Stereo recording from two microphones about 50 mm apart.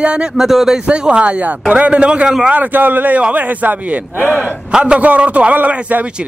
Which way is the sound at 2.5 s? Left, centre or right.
Right.